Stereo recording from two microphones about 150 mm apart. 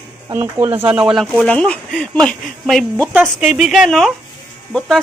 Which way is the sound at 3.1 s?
10° right (ahead or behind).